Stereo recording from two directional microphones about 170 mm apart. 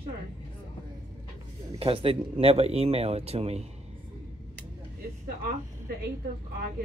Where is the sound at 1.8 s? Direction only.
35° right (ahead or behind).